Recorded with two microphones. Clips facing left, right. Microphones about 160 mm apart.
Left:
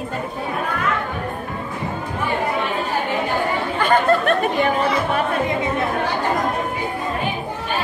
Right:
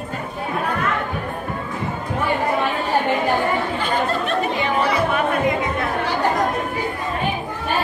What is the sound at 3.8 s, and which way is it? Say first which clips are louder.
Chatter: left 5 dB; 55° left (ahead or behind).